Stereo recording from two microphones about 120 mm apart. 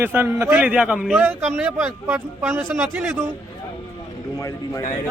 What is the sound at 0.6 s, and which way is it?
Speech, 10° right (ahead or behind).